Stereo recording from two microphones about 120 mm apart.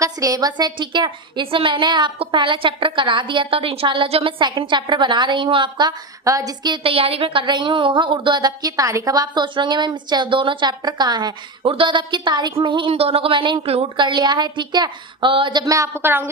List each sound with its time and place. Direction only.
0.0 s a woman's voice: 30° right (ahead or behind); by 13.8 s 50° right (ahead or behind)
13.9 s a woman's voice: 40° right (ahead or behind); by 16.3 s 20° right (ahead or behind)